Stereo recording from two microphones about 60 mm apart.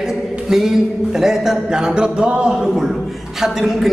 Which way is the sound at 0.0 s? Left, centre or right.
Centre.